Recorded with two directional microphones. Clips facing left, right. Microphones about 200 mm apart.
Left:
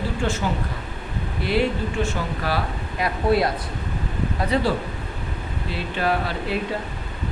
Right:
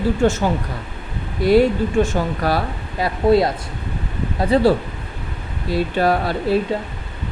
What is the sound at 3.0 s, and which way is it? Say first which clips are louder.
Speech: right 5 dB; 25° right (ahead or behind).